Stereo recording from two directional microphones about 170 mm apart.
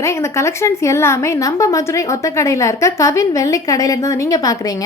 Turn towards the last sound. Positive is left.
turn(degrees=20)  # may be behind; listen again after turning